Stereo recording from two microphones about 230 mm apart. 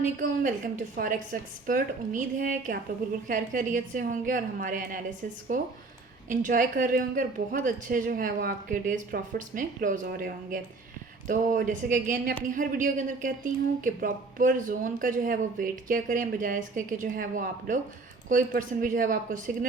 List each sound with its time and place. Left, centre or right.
0.0 s a woman's voice: right